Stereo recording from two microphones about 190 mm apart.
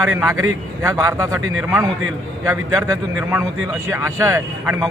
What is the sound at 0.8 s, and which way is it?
A man's voice, 15° right (ahead or behind).